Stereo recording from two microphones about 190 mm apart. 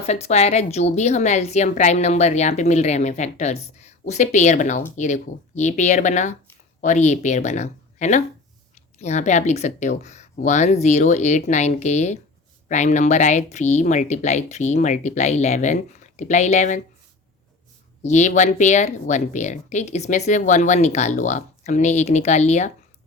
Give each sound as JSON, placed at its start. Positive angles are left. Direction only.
{"t": 0.0, "sound": "a woman's voice", "side_deg": 35}
{"t": 18.0, "sound": "a woman's voice", "side_deg": 40}